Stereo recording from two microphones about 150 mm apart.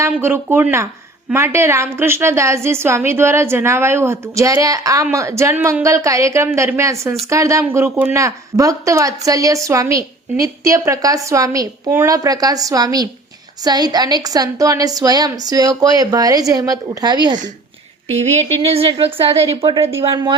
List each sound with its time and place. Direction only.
0.0 s a woman's voice: 15° right (ahead or behind)
18.1 s a woman's voice: 45° right (ahead or behind)